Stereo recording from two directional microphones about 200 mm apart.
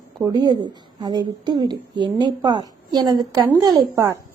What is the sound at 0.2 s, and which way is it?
A woman's voice, 20° right (ahead or behind).